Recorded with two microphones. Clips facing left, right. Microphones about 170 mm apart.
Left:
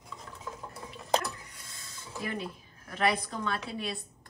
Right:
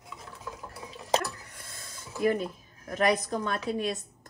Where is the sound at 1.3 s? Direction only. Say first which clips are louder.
Right 3 dB; 50° right (ahead or behind).